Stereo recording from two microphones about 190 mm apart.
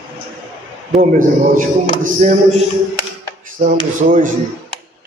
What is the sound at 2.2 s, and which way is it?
Speech, 40° right (ahead or behind).